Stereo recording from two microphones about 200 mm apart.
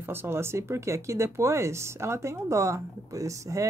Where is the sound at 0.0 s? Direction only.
10° right (ahead or behind).